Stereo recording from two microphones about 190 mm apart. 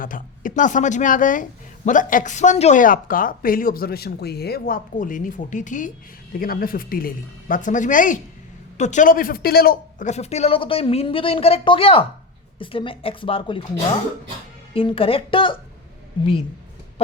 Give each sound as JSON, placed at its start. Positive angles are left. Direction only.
{"t": 0.0, "sound": "speech", "side_deg": 45}
{"t": 10.1, "sound": "speech", "side_deg": 35}
{"t": 14.7, "sound": "speech", "side_deg": 30}